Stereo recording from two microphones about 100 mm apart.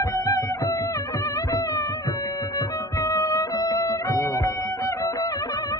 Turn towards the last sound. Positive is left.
turn(degrees=40)  # may be behind; listen again after turning